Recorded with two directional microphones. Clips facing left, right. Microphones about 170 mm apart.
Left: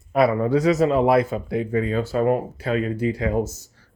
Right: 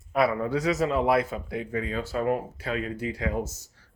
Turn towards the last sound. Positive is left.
turn(degrees=30)  # may be behind; listen again after turning